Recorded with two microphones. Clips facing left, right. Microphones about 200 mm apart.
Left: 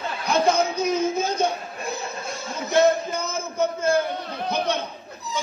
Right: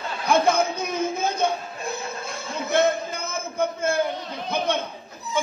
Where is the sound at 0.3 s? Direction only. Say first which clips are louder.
Right 1 dB; 55° right (ahead or behind).